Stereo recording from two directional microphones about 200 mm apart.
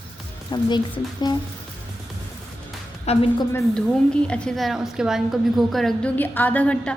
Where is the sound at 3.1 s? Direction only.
30° left (ahead or behind).